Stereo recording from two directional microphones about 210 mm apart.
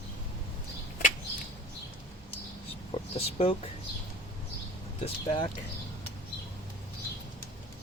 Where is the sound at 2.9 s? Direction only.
25° left (ahead or behind).